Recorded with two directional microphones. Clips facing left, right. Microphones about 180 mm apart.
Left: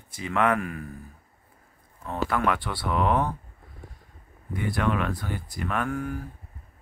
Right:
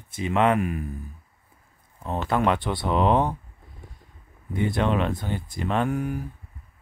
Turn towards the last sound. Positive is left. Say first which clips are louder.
# right 4 dB
turn(degrees=-20)  # may be behind; listen again after turning